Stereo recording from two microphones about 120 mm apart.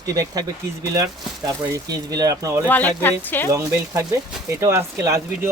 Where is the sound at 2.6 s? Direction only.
15° left (ahead or behind).